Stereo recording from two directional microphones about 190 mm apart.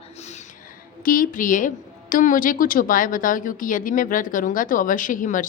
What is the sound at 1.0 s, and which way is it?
A woman's voice, 45° left (ahead or behind).